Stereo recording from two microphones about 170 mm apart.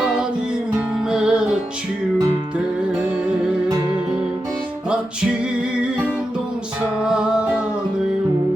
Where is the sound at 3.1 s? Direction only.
5° right (ahead or behind).